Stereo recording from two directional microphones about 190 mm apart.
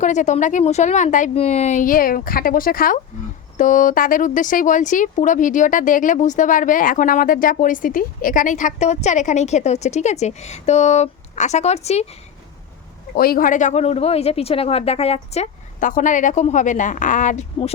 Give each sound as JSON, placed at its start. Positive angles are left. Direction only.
{"t": 0.0, "sound": "speech", "side_deg": 40}
{"t": 13.1, "sound": "speech", "side_deg": 50}